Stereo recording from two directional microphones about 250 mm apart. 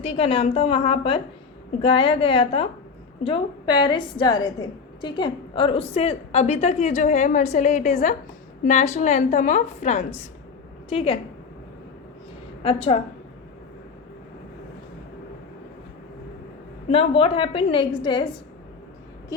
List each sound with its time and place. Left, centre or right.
0.1 s a woman's voice: left
12.6 s a woman's voice: left
16.9 s a woman's voice: left